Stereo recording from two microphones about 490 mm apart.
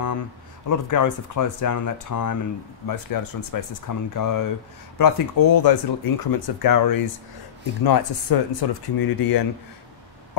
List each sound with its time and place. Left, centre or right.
0.7 s speech: left